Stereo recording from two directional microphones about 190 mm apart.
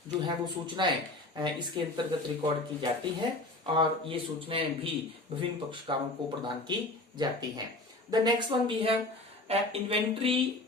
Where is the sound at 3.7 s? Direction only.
30° right (ahead or behind).